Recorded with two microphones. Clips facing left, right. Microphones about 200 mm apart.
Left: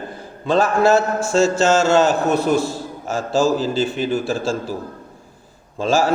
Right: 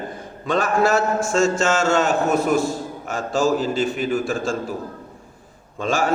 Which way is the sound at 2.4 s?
Centre (ahead or behind).